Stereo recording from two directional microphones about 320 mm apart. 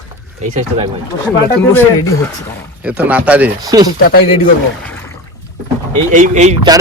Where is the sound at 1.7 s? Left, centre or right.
Centre.